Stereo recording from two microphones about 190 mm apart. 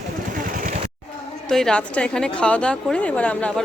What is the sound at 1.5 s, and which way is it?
A woman's voice, 5° left (ahead or behind).